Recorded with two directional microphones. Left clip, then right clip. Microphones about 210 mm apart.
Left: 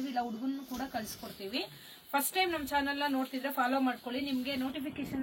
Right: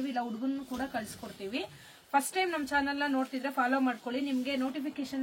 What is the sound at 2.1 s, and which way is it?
Speech, 5° right (ahead or behind).